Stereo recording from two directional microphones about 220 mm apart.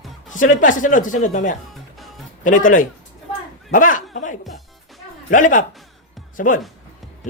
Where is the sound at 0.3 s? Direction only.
35° left (ahead or behind).